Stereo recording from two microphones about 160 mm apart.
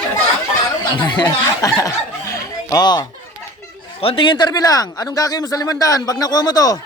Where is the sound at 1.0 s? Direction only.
25° left (ahead or behind).